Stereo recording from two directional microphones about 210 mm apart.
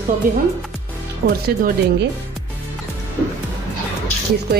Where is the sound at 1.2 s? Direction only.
45° right (ahead or behind).